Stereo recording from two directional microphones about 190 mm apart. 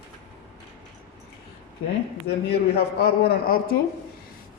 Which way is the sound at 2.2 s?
55° left (ahead or behind).